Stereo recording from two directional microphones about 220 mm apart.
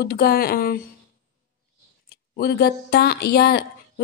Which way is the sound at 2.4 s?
45° left (ahead or behind).